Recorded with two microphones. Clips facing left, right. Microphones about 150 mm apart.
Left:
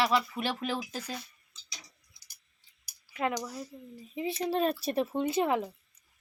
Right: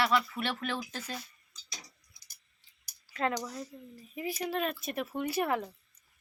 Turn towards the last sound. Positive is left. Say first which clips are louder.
# left 3 dB
turn(degrees=20)  # may be behind; listen again after turning